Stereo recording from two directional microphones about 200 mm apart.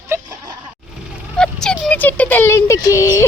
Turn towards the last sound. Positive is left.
turn(degrees=15)  # may be behind; listen again after turning